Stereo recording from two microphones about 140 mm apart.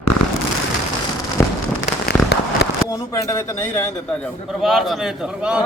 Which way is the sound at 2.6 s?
90° left.